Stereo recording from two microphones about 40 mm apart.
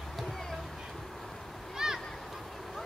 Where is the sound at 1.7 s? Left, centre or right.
Centre.